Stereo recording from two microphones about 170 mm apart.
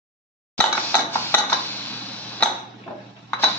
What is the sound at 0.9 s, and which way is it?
Dishes, 15° left (ahead or behind).